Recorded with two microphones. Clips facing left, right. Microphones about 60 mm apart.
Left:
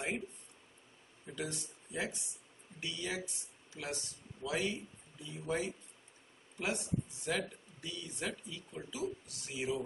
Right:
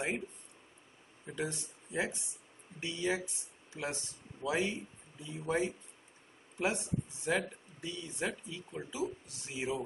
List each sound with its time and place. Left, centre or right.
1.2 s speech: right